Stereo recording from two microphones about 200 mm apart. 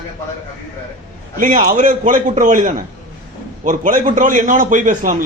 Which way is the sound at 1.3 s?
40° right (ahead or behind).